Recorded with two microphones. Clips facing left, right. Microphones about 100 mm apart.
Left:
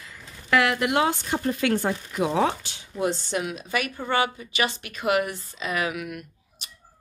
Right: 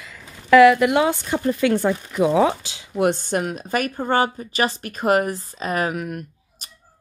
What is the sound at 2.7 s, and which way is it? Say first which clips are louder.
Speech: right 6 dB; 80° right.